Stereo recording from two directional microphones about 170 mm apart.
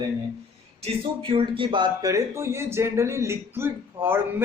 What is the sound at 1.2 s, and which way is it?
Speech, 30° right (ahead or behind).